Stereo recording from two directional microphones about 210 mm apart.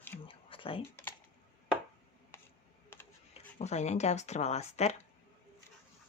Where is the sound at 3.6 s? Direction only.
30° left (ahead or behind).